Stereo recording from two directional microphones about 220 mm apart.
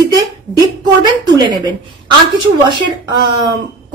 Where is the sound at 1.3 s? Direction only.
20° right (ahead or behind).